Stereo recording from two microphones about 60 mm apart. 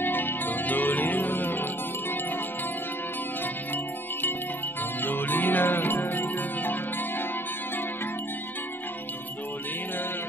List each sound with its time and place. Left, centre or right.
0.0 s music: left
3.7 s music: left